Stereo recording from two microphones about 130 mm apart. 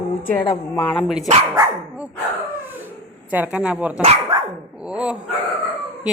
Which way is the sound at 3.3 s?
10° right (ahead or behind).